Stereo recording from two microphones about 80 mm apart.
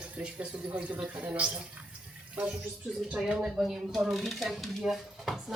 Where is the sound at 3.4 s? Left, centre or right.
Centre.